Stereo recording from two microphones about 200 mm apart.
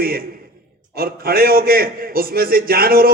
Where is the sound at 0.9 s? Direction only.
50° right (ahead or behind).